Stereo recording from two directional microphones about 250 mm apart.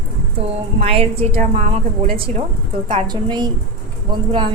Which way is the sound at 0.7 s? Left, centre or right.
Right.